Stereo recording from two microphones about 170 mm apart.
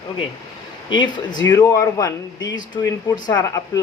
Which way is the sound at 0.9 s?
25° left (ahead or behind).